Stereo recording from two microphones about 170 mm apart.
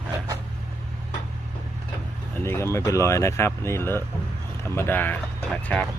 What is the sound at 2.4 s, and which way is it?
Speech, 15° left (ahead or behind).